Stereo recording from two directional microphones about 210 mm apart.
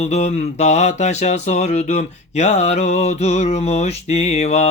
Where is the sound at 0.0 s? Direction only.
35° left (ahead or behind).